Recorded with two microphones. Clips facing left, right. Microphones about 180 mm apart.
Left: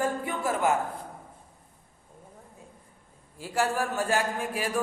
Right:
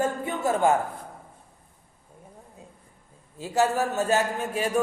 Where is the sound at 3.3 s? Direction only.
20° right (ahead or behind).